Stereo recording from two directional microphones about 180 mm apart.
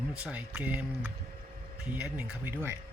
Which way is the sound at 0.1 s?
5° right (ahead or behind).